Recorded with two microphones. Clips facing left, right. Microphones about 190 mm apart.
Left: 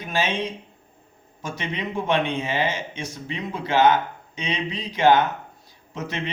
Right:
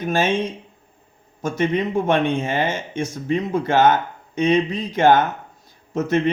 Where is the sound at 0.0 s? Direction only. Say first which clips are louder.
Right 5 dB; 50° right (ahead or behind).